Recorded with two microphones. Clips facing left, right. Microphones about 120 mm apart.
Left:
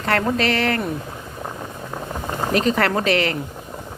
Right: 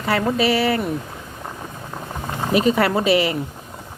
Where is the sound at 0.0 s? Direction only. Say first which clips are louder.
Right 1 dB; 5° right (ahead or behind).